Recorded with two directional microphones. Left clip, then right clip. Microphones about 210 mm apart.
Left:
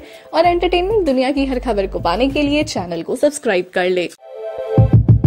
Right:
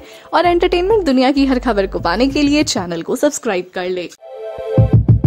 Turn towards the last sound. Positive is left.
turn(degrees=0)  # may be behind; listen again after turning